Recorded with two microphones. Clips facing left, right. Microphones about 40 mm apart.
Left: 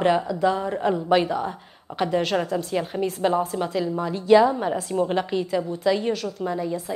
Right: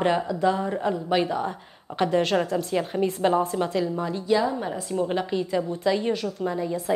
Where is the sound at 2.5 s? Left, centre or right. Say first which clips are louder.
Even; centre.